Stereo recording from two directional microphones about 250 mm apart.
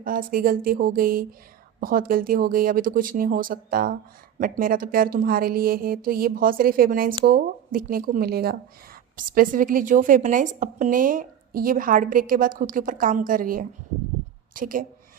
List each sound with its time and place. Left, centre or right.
0.0 s a woman's voice: right